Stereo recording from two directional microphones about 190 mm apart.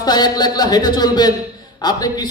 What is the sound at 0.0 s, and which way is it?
A man's voice, 20° left (ahead or behind).